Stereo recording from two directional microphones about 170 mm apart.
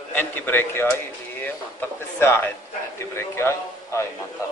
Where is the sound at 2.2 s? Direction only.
15° left (ahead or behind).